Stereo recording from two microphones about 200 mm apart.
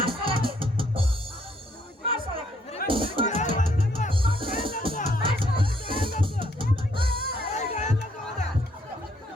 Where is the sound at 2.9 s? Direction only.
25° right (ahead or behind).